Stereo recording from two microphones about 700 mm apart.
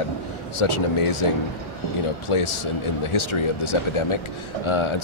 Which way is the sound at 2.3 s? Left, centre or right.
Left.